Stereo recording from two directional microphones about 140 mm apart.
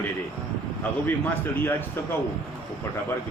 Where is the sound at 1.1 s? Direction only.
15° left (ahead or behind).